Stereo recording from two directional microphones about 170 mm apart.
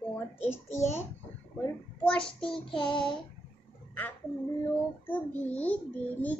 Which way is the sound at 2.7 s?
30° left (ahead or behind).